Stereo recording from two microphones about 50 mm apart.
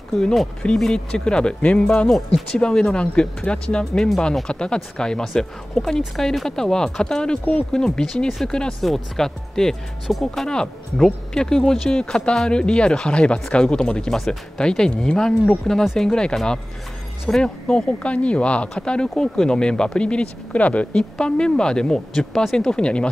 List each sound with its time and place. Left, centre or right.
0.2 s speech: centre; by 2.0 s left
2.0 s speech: centre
2.6 s speech: centre
3.9 s speech: centre
4.5 s speech: centre
22.7 s speech: centre